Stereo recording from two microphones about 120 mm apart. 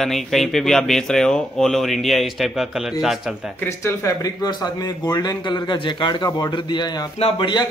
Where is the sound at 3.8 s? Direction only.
25° left (ahead or behind).